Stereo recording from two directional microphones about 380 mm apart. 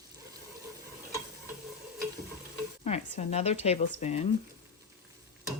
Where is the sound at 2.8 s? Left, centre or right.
Centre.